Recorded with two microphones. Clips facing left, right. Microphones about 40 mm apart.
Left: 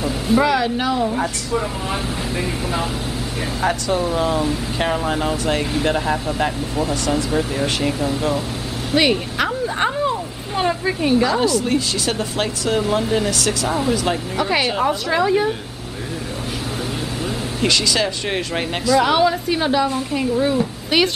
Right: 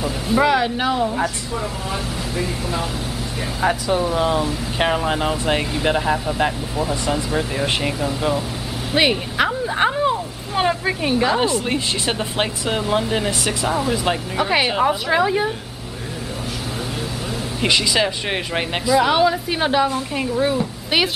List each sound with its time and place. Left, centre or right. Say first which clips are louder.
0.0 s a sound: left 1 dB; centre
0.5 s speech: even; centre
2.3 s speech: even; centre
3.6 s speech: right 1 dB; centre
4.7 s speech: right 3 dB; centre
5.9 s speech: right 3 dB; centre
8.9 s a sound: even; centre
11.2 s speech: left 1 dB; right
13.7 s speech: right 1 dB; centre
17.6 s a woman's voice: right 1 dB; centre
19.6 s speech: right 2 dB; centre